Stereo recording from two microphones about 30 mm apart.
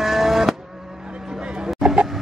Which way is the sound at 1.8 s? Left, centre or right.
Centre.